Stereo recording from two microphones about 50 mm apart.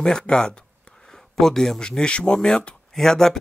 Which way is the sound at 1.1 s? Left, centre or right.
Centre.